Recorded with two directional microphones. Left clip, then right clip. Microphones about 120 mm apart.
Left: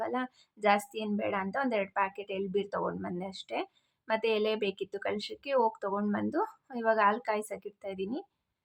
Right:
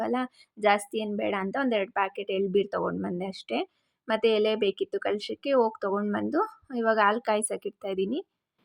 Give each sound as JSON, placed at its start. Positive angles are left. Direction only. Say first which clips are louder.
{"t": 0.0, "sound": "a woman's voice", "louder": "right 4 dB", "side_deg": -40}
{"t": 6.3, "sound": "a woman's voice", "louder": "right 5 dB", "side_deg": -40}